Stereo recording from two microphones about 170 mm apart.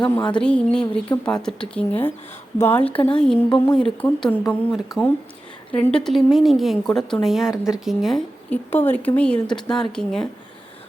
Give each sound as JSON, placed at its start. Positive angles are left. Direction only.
{"t": 0.0, "sound": "speech", "side_deg": 25}
{"t": 0.3, "sound": "a woman's voice", "side_deg": 5}
{"t": 4.8, "sound": "a woman's voice", "side_deg": 0}
{"t": 8.7, "sound": "a woman's voice", "side_deg": 10}